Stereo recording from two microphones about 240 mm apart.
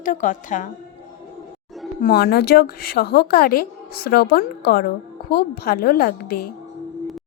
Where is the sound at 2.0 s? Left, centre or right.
Left.